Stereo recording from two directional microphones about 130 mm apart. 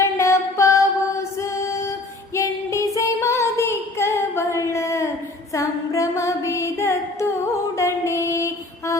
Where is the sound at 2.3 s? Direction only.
25° left (ahead or behind).